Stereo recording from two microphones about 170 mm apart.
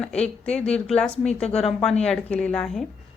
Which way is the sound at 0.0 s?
5° left (ahead or behind).